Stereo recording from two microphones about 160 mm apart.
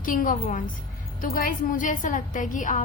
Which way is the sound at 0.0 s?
55° left (ahead or behind).